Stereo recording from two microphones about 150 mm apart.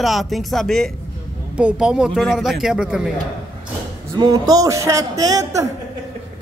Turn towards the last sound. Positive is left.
turn(degrees=-20)  # may be behind; listen again after turning